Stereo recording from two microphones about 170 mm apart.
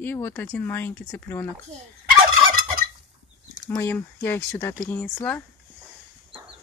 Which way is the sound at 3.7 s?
15° left (ahead or behind).